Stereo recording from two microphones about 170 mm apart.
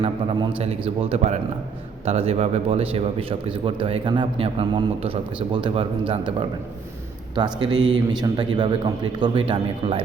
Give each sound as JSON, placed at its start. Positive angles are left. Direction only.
{"t": 0.0, "sound": "a man's voice", "side_deg": -35}